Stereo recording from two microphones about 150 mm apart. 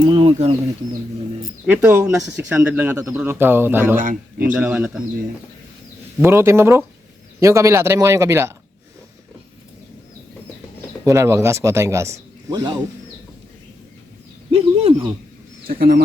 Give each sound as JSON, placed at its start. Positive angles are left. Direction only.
{"t": 0.0, "sound": "speech", "side_deg": -35}
{"t": 1.6, "sound": "speech", "side_deg": -15}
{"t": 3.9, "sound": "a man's voice", "side_deg": -60}
{"t": 4.5, "sound": "speech", "side_deg": -10}
{"t": 6.2, "sound": "a man's voice", "side_deg": -15}
{"t": 11.0, "sound": "a man's voice", "side_deg": -20}
{"t": 14.5, "sound": "speech", "side_deg": -40}
{"t": 15.6, "sound": "speech", "side_deg": -85}